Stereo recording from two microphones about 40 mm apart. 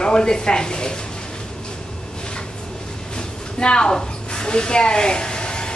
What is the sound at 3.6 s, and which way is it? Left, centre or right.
Speech, left.